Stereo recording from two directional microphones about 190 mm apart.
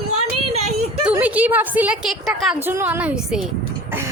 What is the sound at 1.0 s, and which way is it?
A woman's voice, 10° right (ahead or behind).